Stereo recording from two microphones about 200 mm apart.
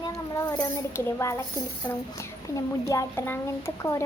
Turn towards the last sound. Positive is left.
turn(degrees=15)  # may be behind; listen again after turning